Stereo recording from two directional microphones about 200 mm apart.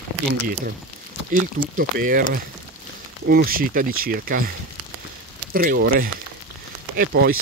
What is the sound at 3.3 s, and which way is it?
Speech, 50° right (ahead or behind).